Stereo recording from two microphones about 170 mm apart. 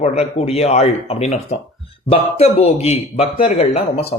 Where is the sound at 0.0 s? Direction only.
40° left (ahead or behind).